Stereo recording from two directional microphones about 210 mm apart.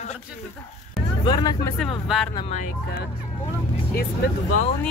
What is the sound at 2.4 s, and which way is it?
Speech, 30° left (ahead or behind).